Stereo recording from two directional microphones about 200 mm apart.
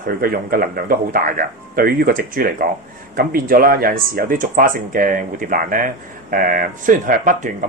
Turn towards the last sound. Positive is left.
turn(degrees=-40)  # may be behind; listen again after turning